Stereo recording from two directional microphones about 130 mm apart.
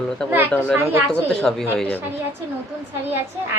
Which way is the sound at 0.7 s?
20° right (ahead or behind).